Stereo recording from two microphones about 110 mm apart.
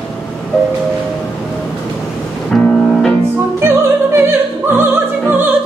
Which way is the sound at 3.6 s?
20° right (ahead or behind).